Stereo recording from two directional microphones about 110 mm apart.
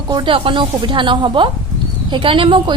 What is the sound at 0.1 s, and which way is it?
A woman's voice, 50° right (ahead or behind).